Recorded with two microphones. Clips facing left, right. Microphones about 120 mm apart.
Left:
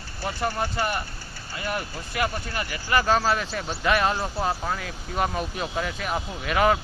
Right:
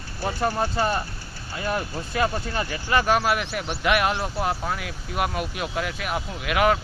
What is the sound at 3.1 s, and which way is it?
Speech, 5° right (ahead or behind).